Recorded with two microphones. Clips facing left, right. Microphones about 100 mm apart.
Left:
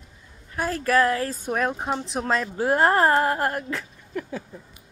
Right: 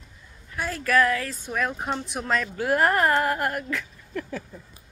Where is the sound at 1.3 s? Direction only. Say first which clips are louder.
Left 3 dB; 40° left (ahead or behind).